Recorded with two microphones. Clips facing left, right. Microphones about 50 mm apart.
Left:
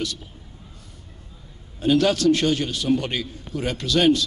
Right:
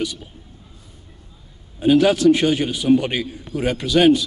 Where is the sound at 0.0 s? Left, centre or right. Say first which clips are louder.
Right 4 dB; centre.